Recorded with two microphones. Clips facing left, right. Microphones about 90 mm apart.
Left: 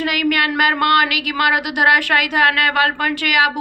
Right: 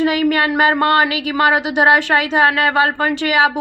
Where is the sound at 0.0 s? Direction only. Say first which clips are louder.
Right 3 dB; 30° right (ahead or behind).